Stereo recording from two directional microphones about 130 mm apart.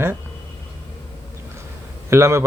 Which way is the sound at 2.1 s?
20° right (ahead or behind).